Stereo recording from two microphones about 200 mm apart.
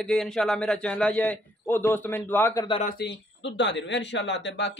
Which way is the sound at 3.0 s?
65° left (ahead or behind).